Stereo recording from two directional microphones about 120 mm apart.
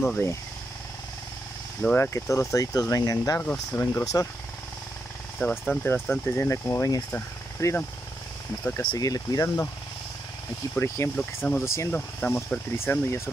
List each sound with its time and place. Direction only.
0.0 s speech: 20° left (ahead or behind)
1.8 s speech: 10° left (ahead or behind)
2.1 s speech: 25° left (ahead or behind)
5.4 s speech: 15° left (ahead or behind)
8.9 s speech: 30° left (ahead or behind)
10.7 s speech: 15° left (ahead or behind)